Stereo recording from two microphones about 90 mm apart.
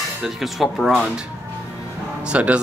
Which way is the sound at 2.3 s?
15° right (ahead or behind).